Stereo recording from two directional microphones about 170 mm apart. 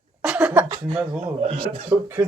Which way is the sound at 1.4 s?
35° right (ahead or behind).